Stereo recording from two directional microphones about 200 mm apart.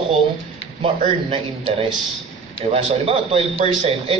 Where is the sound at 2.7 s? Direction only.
30° right (ahead or behind).